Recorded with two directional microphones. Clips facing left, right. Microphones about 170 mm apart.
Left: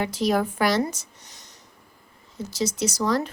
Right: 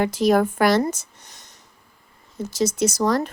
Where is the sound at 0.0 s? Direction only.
50° right (ahead or behind).